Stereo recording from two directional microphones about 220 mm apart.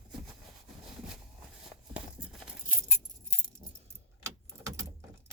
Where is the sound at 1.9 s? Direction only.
5° right (ahead or behind).